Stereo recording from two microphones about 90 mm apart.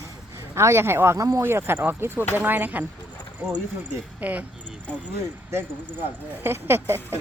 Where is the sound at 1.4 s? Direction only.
25° right (ahead or behind).